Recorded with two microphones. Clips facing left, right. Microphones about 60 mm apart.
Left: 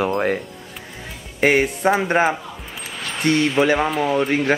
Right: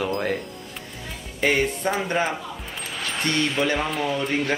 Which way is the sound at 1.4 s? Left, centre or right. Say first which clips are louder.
Left 5 dB; centre.